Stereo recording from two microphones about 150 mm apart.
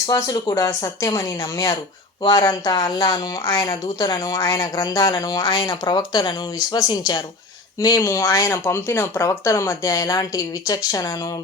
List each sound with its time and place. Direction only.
0.1 s a woman's voice: 25° left (ahead or behind)